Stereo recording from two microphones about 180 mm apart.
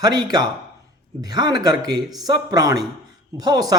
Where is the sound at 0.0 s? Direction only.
20° right (ahead or behind).